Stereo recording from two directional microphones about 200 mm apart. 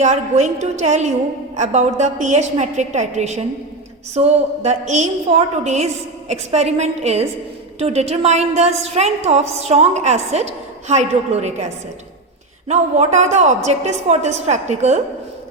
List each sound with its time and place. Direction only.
0.0 s a woman's voice: 35° right (ahead or behind)
12.6 s a woman's voice: 35° right (ahead or behind)